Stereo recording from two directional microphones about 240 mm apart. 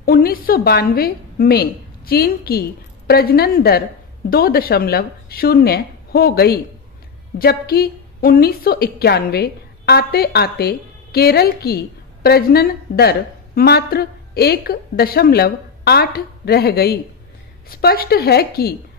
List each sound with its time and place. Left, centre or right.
0.0 s a woman's voice: left